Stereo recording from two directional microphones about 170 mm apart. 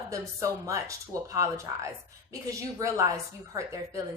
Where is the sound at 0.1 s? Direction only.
20° right (ahead or behind).